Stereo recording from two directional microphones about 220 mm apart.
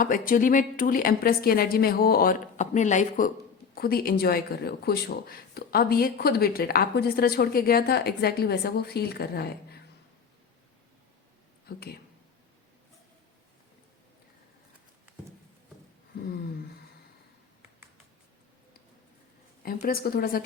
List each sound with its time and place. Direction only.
0.0 s a woman's voice: 40° left (ahead or behind)
11.7 s speech: 45° left (ahead or behind)
19.6 s a woman's voice: 40° left (ahead or behind)